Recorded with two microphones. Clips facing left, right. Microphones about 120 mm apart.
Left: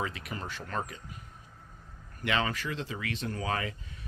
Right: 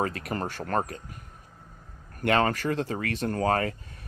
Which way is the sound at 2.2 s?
50° right (ahead or behind).